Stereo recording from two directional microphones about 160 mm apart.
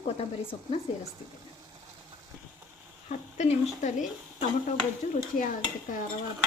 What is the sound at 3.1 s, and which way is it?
Speech, 45° left (ahead or behind).